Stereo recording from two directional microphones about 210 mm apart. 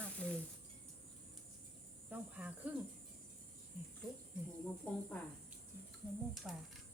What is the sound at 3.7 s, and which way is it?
Speech, 45° right (ahead or behind).